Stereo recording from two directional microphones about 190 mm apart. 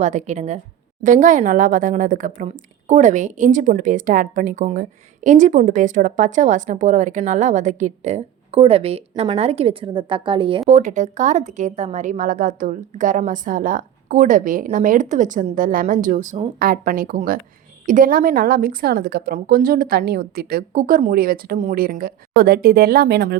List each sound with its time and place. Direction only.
0.0 s a woman's voice: 40° right (ahead or behind)
10.7 s a woman's voice: 40° right (ahead or behind); by 23.4 s 60° right (ahead or behind)